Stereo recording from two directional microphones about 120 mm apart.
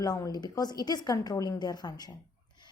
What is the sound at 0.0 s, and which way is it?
A woman's voice, 35° left (ahead or behind).